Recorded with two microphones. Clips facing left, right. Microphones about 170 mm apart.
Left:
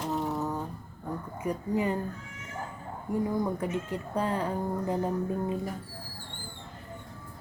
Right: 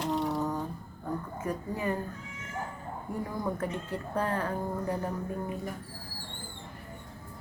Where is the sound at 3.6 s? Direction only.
15° left (ahead or behind).